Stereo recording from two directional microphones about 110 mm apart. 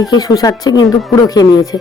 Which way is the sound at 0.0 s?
35° left (ahead or behind).